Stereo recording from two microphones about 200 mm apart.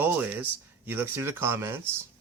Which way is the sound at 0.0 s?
10° right (ahead or behind).